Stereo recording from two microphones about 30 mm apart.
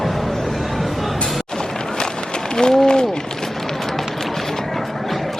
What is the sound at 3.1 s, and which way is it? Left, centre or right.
Run, centre.